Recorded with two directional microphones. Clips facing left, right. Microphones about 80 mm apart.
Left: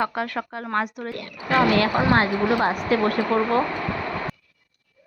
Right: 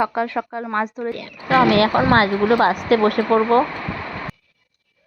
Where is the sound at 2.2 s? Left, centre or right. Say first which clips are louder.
Right 5 dB; right.